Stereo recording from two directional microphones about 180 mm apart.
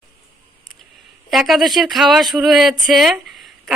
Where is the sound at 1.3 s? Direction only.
Centre (ahead or behind).